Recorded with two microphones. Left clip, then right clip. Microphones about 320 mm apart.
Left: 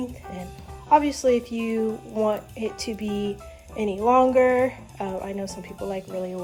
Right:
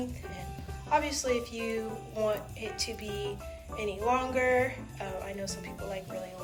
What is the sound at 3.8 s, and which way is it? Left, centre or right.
A woman's voice, centre.